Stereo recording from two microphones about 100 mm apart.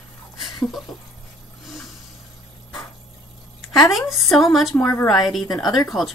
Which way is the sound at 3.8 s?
Centre (ahead or behind).